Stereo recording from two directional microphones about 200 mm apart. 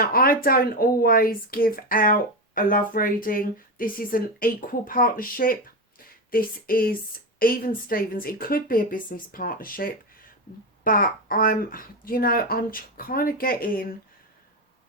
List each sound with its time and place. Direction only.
0.0 s speech: 45° left (ahead or behind)